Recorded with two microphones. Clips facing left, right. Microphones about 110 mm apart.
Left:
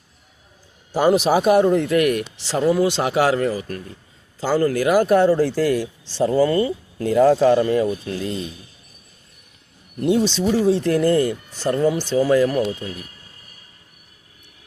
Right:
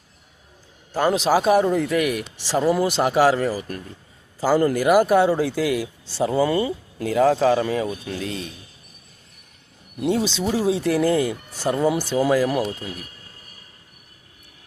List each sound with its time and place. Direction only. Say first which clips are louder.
0.9 s a man's voice: left 4 dB; 10° left (ahead or behind)
1.3 s speech: right 1 dB; centre (ahead or behind)
6.2 s speech: left 3 dB; 15° right (ahead or behind)
7.0 s speech: left 3 dB; centre (ahead or behind)
10.0 s speech: left 3 dB; centre (ahead or behind)